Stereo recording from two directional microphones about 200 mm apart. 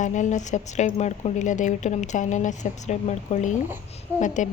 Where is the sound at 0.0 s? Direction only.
40° left (ahead or behind).